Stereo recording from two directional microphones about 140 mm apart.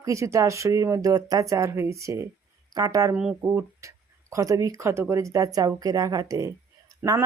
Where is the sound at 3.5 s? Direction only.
20° right (ahead or behind).